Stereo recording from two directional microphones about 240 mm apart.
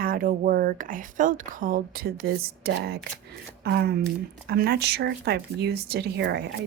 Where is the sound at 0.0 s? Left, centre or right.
Right.